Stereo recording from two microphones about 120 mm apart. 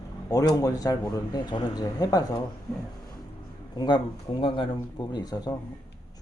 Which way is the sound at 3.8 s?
40° left (ahead or behind).